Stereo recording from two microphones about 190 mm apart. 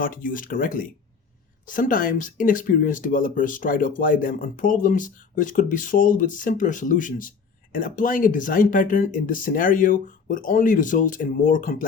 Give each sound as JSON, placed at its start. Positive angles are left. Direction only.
{"t": 0.0, "sound": "speech", "side_deg": 45}